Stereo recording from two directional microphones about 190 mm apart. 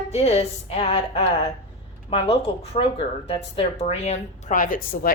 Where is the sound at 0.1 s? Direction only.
35° left (ahead or behind).